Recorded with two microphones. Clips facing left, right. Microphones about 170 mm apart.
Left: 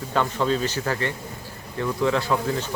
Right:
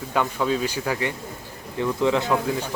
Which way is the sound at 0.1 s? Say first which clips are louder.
Even; 10° right (ahead or behind).